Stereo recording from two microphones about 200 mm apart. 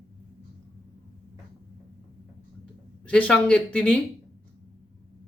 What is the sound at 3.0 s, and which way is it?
Speech, 5° left (ahead or behind).